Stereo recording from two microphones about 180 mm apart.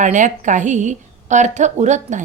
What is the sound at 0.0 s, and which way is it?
A woman's voice, 45° right (ahead or behind).